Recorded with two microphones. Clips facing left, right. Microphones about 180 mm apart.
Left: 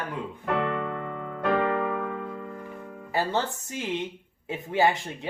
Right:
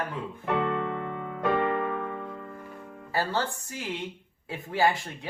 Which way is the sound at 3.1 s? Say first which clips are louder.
Left 2 dB; 20° left (ahead or behind).